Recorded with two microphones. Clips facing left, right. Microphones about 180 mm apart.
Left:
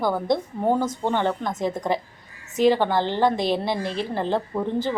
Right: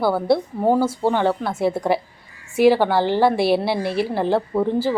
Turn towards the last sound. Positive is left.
turn(degrees=-10)  # may be behind; listen again after turning